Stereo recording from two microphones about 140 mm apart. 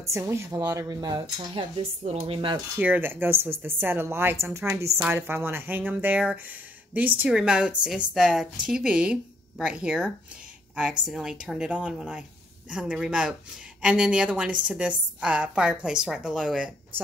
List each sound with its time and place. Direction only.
0.0 s speech: 20° right (ahead or behind); by 2.5 s 45° right (ahead or behind)
2.8 s a woman's voice: 15° right (ahead or behind)